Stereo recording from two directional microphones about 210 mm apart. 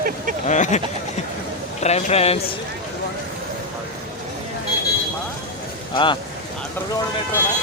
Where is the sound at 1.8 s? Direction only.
30° left (ahead or behind).